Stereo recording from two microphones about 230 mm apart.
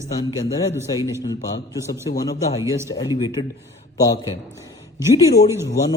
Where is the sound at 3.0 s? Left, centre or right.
Centre.